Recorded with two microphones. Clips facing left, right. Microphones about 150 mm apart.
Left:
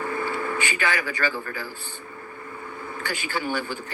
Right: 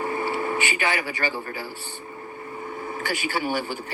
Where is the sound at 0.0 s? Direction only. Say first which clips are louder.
Right 2 dB; 20° right (ahead or behind).